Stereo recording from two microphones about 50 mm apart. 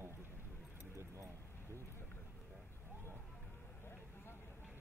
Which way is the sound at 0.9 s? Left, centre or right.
Right.